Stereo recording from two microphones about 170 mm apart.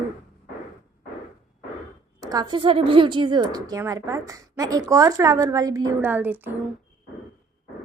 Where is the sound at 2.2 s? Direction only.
20° right (ahead or behind).